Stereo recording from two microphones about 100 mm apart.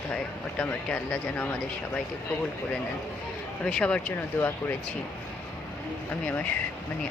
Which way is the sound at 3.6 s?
10° left (ahead or behind).